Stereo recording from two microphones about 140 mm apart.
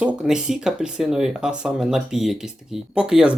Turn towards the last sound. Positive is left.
turn(degrees=-5)  # may be behind; listen again after turning